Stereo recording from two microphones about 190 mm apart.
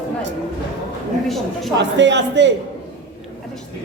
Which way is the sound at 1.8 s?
70° right (ahead or behind).